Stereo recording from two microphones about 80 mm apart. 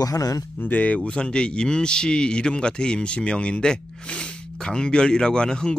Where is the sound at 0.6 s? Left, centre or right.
Left.